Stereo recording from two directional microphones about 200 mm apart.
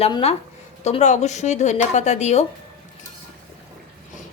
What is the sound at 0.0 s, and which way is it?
A woman's voice, 30° left (ahead or behind).